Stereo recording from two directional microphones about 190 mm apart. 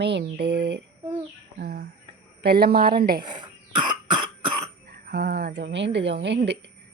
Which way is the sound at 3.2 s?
25° right (ahead or behind).